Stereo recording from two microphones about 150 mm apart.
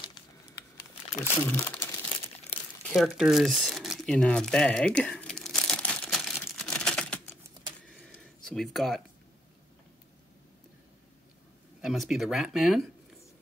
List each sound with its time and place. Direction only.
1.2 s speech: 15° left (ahead or behind)
2.5 s crumpling: 45° left (ahead or behind)
2.9 s crumpling: centre (ahead or behind)
7.9 s a sound: 5° left (ahead or behind)
11.8 s speech: centre (ahead or behind)